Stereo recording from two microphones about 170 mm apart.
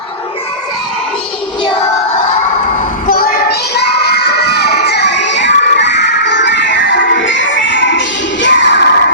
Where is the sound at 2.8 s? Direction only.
55° left (ahead or behind).